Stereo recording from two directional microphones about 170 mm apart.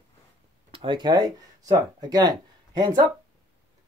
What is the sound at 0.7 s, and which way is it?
Speech, 30° right (ahead or behind).